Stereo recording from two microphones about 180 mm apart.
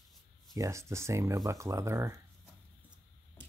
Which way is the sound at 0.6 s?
15° right (ahead or behind).